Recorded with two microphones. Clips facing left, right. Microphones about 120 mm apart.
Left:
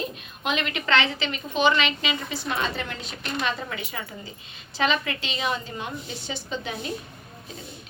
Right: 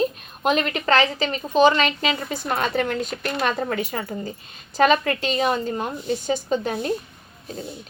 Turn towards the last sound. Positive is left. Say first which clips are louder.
# right 8 dB
turn(degrees=-45)  # may be behind; listen again after turning